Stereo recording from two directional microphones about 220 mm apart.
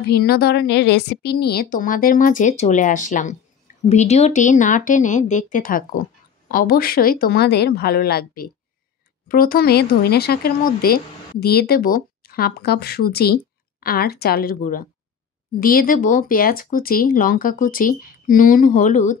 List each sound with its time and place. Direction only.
0.0 s speech: 45° left (ahead or behind)